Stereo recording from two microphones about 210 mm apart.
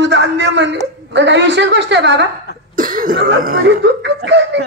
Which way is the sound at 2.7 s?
40° right (ahead or behind).